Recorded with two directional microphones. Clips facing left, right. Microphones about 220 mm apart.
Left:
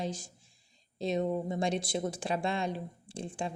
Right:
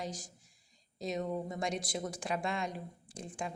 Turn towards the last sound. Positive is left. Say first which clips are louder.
# left 4 dB
turn(degrees=30)  # may be behind; listen again after turning